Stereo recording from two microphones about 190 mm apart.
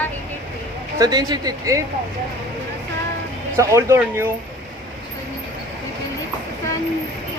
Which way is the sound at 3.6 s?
15° right (ahead or behind).